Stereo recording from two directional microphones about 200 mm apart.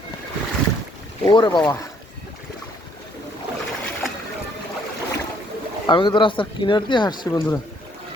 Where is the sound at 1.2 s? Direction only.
25° left (ahead or behind).